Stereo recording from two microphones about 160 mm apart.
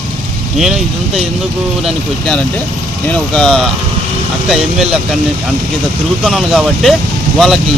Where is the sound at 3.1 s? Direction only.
5° left (ahead or behind).